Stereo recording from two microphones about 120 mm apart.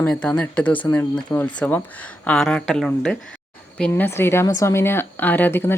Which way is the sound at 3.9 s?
20° left (ahead or behind).